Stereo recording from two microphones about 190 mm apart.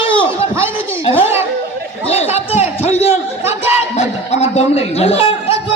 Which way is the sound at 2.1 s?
35° left (ahead or behind).